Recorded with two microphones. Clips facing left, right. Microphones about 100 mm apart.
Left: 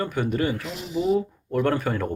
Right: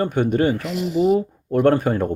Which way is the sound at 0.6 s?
60° right (ahead or behind).